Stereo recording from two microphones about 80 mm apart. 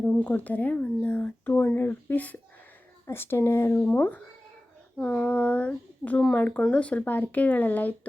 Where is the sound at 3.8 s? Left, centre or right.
Left.